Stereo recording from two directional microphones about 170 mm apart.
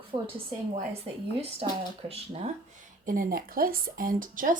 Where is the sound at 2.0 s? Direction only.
35° right (ahead or behind).